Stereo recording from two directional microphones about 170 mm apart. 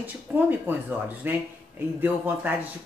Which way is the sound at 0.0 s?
10° right (ahead or behind).